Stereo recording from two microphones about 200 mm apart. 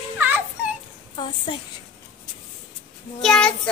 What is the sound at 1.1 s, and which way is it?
Speech, 25° left (ahead or behind).